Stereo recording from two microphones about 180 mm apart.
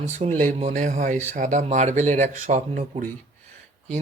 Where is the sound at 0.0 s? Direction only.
45° right (ahead or behind).